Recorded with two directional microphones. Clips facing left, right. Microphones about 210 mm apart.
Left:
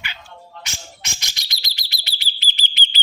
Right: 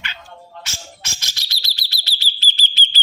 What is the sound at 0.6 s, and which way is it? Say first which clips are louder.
Bird: even; 15° left (ahead or behind).